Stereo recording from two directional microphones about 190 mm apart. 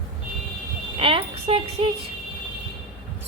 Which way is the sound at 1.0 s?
30° right (ahead or behind).